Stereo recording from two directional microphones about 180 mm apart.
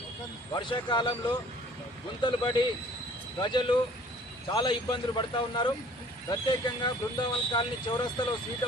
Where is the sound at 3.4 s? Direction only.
25° left (ahead or behind).